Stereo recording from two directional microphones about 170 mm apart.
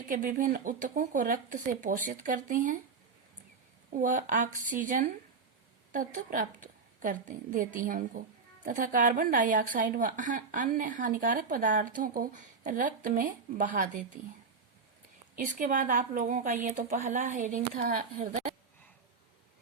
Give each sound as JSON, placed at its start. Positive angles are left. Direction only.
{"t": 0.1, "sound": "a woman's voice", "side_deg": -55}
{"t": 3.9, "sound": "a woman's voice", "side_deg": -50}
{"t": 15.4, "sound": "a woman's voice", "side_deg": -50}